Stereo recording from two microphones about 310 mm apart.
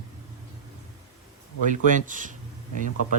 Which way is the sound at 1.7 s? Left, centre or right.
Right.